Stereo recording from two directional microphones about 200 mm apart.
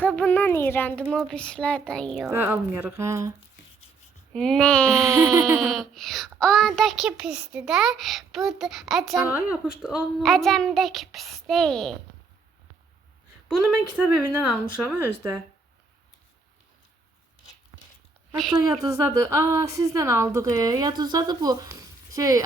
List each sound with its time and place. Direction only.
0.0 s a child's voice: 5° left (ahead or behind)
2.2 s a woman's voice: 10° right (ahead or behind)
4.3 s a child's voice: 5° left (ahead or behind)
4.9 s a woman's voice: 15° right (ahead or behind)
5.5 s a child's voice: centre (ahead or behind)
13.5 s a child's voice: centre (ahead or behind)
18.5 s a woman's voice: 20° right (ahead or behind)